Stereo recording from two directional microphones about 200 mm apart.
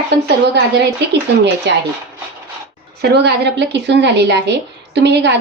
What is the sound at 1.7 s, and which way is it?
Speech, 60° right (ahead or behind).